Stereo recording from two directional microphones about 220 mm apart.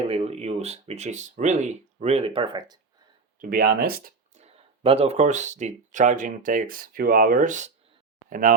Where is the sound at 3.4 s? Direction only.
45° right (ahead or behind).